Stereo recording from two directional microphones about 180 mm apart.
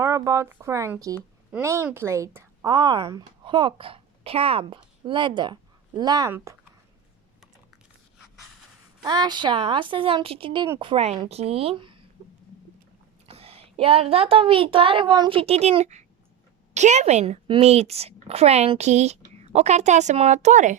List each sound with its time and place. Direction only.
0.0 s speech: 15° right (ahead or behind)
9.0 s a woman's voice: 25° right (ahead or behind)
13.2 s a woman's voice: 35° right (ahead or behind)